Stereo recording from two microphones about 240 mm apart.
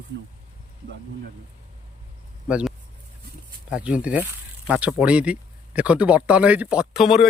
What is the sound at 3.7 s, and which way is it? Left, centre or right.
Speech, centre.